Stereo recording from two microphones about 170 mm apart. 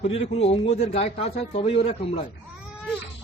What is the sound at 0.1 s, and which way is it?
A man's voice, 40° left (ahead or behind).